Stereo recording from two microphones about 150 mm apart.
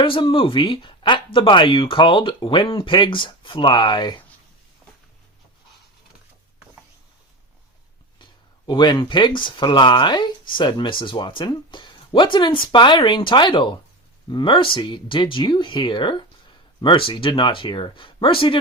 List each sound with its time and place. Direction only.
0.0 s speech: 35° left (ahead or behind)
8.2 s speech: 30° left (ahead or behind)